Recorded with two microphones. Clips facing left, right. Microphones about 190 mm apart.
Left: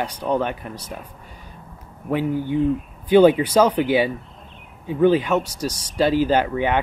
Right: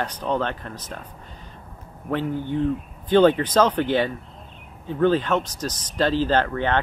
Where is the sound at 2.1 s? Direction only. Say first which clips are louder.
Left 3 dB; 10° left (ahead or behind).